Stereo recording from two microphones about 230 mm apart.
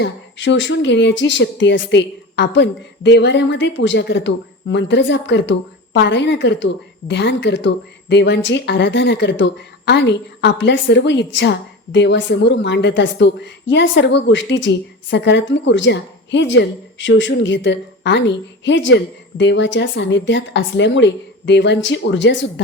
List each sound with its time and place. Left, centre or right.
0.0 s a woman's voice: left